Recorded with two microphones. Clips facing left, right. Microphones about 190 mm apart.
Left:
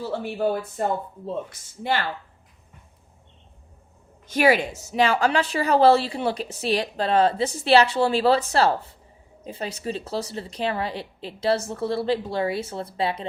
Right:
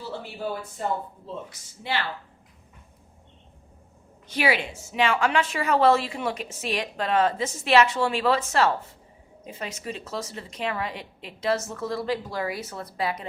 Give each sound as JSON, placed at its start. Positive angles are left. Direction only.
{"t": 0.0, "sound": "speech", "side_deg": 55}
{"t": 4.3, "sound": "speech", "side_deg": 45}